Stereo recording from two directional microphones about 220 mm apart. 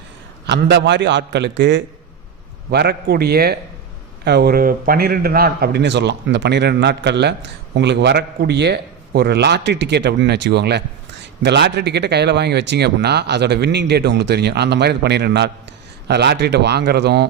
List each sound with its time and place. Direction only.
0.4 s speech: 55° right (ahead or behind)